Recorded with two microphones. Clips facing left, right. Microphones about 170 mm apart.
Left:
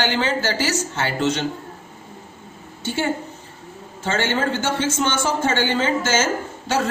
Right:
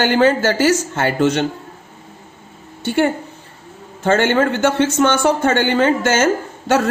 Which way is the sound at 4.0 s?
55° right (ahead or behind).